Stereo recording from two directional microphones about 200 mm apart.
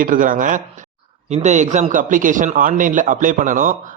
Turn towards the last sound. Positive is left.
turn(degrees=-40)  # may be behind; listen again after turning